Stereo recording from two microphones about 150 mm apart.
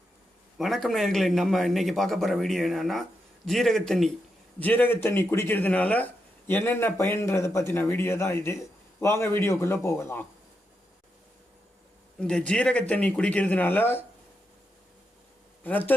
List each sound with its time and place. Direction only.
0.6 s a man's voice: centre (ahead or behind); by 10.2 s 15° left (ahead or behind)
12.2 s speech: 5° left (ahead or behind)